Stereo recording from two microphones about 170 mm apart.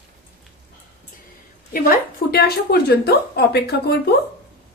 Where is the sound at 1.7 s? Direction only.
60° left (ahead or behind).